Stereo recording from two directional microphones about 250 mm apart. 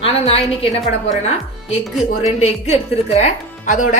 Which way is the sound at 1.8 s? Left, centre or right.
Centre.